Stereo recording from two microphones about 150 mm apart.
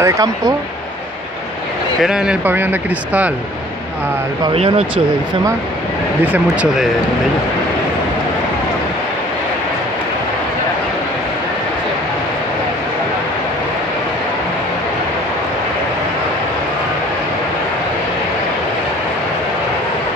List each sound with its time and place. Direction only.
0.0 s speech: 20° right (ahead or behind)
2.0 s speech: 5° right (ahead or behind)
4.6 s speech: 40° right (ahead or behind)
6.2 s speech: 10° right (ahead or behind)